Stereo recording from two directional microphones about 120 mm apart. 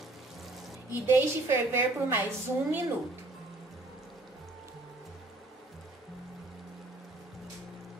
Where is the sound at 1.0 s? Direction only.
20° right (ahead or behind).